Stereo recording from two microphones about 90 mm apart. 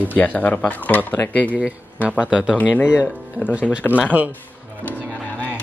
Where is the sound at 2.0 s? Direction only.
10° right (ahead or behind).